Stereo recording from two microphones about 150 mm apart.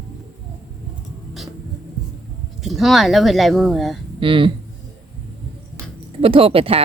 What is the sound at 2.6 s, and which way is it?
Speech, centre (ahead or behind).